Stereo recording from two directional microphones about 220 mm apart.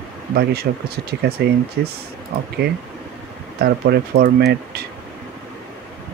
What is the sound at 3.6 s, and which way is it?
Speech, 45° right (ahead or behind).